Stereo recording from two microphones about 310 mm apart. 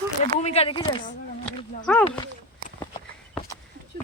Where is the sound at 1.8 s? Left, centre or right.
Centre.